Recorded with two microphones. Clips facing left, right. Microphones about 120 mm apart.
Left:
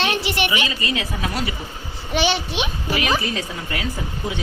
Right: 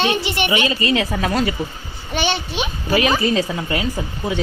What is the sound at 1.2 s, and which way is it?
Speech, 45° right (ahead or behind).